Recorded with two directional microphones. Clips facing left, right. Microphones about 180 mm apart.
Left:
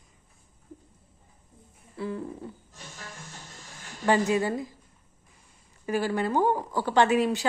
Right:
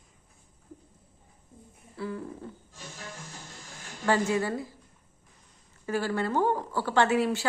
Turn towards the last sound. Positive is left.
turn(degrees=15)  # may be behind; listen again after turning